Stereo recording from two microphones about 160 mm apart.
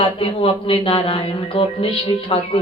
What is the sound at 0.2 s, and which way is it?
A woman's voice, 35° left (ahead or behind).